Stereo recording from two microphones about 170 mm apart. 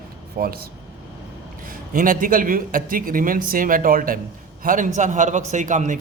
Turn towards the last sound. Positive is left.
turn(degrees=-45)  # may be behind; listen again after turning